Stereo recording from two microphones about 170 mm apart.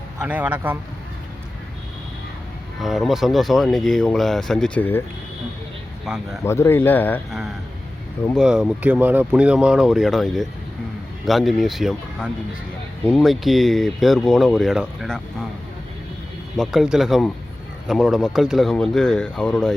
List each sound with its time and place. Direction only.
0.2 s speech: 10° right (ahead or behind)
2.8 s speech: centre (ahead or behind)
6.1 s speech: 5° right (ahead or behind)
6.4 s speech: 15° left (ahead or behind)
8.4 s speech: centre (ahead or behind)
16.6 s speech: 5° right (ahead or behind)